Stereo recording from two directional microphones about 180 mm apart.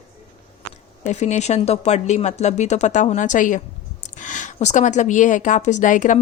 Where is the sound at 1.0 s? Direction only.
40° left (ahead or behind).